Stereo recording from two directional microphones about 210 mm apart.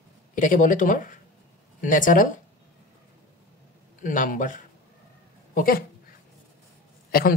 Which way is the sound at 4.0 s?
40° left (ahead or behind).